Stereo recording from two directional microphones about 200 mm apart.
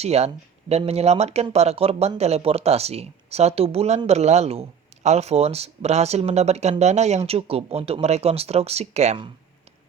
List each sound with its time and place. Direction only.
0.0 s speech: 30° right (ahead or behind)